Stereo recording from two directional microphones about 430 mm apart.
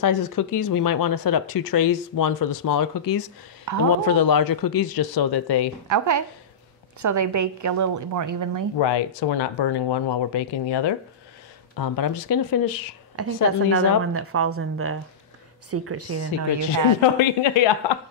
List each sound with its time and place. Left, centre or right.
0.0 s speech: left
3.7 s a man's voice: right
4.0 s speech: left
5.9 s a woman's voice: right
8.7 s speech: left
11.7 s speech: left
13.1 s a woman's voice: right
17.0 s speech: left